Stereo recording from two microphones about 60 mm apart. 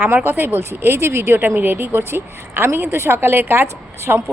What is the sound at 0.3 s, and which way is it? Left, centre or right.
A woman's voice, right.